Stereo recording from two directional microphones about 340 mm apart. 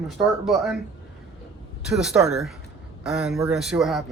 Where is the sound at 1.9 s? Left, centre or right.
Centre.